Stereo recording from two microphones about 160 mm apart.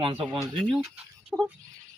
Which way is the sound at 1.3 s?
5° right (ahead or behind).